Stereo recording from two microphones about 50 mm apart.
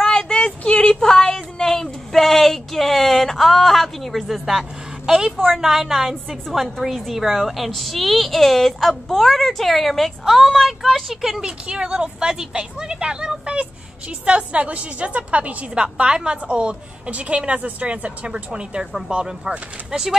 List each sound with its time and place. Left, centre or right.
0.0 s a sound: centre
4.5 s a woman's voice: centre
11.4 s a woman's voice: centre